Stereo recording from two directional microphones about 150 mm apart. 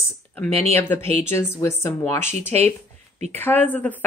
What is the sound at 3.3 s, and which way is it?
Speech, 15° left (ahead or behind).